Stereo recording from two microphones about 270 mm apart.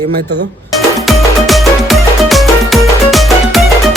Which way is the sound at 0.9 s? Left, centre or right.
Centre.